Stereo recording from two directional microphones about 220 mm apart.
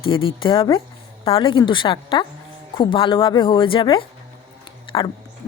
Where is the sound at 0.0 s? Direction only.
25° left (ahead or behind).